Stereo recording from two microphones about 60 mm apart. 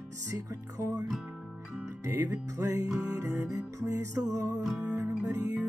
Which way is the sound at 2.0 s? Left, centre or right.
Right.